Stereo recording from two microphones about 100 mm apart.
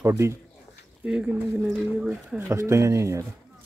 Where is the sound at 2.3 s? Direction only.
30° right (ahead or behind).